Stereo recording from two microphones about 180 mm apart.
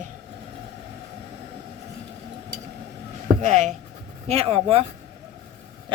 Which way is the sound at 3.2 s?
45° right (ahead or behind).